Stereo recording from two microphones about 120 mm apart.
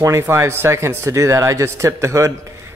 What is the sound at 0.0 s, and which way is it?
Speech, 20° right (ahead or behind).